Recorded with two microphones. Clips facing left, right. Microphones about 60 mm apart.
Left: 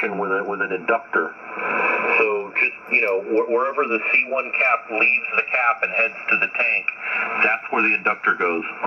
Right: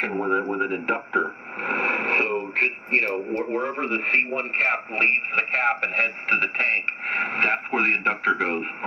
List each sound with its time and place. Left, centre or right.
0.0 s speech: left